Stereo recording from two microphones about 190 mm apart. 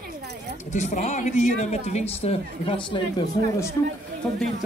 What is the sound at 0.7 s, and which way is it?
A woman's voice, 40° left (ahead or behind).